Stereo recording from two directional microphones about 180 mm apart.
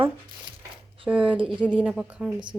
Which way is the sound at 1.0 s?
5° right (ahead or behind).